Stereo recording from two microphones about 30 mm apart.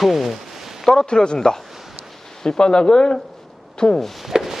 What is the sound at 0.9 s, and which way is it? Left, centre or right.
Speech, left.